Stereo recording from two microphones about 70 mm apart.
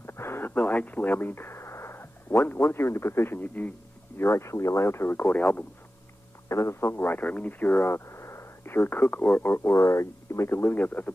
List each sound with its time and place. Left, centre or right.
0.0 s speech: left
4.2 s speech: left
5.2 s speech: left
6.5 s speech: left